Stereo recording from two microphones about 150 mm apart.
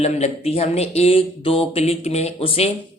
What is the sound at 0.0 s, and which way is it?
Speech, 45° left (ahead or behind).